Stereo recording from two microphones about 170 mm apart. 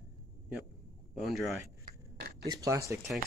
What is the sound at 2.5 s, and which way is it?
Speech, 20° right (ahead or behind).